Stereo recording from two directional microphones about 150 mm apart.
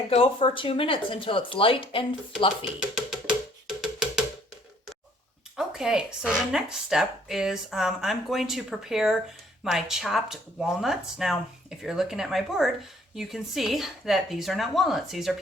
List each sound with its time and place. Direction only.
0.1 s speech: 40° left (ahead or behind)
2.9 s music: 5° right (ahead or behind)
5.5 s speech: 5° right (ahead or behind)